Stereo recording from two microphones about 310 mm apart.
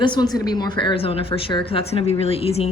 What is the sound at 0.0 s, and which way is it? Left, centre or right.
A woman's voice, centre.